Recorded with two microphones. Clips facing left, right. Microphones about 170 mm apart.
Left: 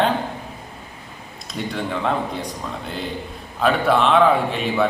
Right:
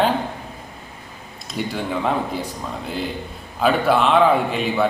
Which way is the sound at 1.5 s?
5° right (ahead or behind).